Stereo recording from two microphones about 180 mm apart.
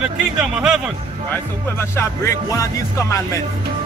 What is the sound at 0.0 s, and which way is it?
Speech, 5° right (ahead or behind).